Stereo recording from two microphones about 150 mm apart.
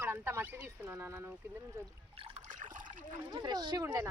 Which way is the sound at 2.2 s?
50° right (ahead or behind).